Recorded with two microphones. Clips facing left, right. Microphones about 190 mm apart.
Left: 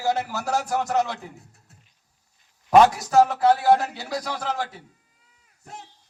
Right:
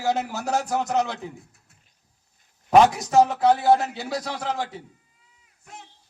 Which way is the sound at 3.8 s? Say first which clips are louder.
Right 1 dB; centre (ahead or behind).